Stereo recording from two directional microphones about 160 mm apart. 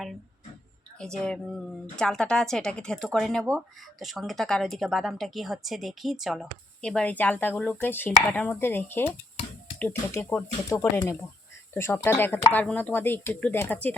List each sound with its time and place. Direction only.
0.9 s a woman's voice: 5° left (ahead or behind)